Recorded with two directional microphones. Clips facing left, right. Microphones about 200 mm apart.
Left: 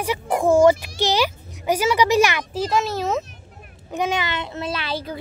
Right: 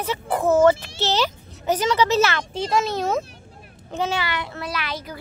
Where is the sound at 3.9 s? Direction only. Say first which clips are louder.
Left 1 dB; 15° left (ahead or behind).